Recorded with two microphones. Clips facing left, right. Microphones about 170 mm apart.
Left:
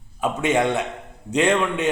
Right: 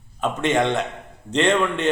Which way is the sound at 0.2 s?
10° left (ahead or behind).